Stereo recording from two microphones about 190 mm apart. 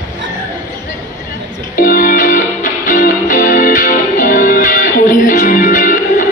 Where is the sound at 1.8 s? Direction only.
45° left (ahead or behind).